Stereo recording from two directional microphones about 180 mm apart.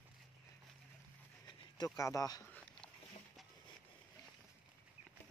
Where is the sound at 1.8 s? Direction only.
20° left (ahead or behind).